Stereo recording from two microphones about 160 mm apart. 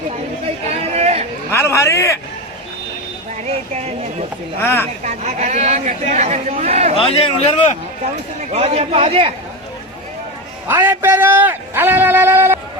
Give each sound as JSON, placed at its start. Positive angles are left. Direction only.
{"t": 0.7, "sound": "chatter", "side_deg": -40}
{"t": 1.5, "sound": "a sound", "side_deg": 15}
{"t": 4.6, "sound": "speech", "side_deg": 15}
{"t": 5.0, "sound": "speech", "side_deg": -45}
{"t": 6.9, "sound": "a man's voice", "side_deg": 40}
{"t": 8.5, "sound": "a man's voice", "side_deg": -40}
{"t": 10.7, "sound": "a man's voice", "side_deg": -15}